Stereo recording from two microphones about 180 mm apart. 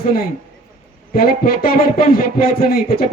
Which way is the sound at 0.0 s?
55° left (ahead or behind).